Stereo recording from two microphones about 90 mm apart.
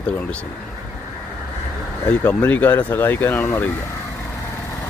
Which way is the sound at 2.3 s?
20° left (ahead or behind).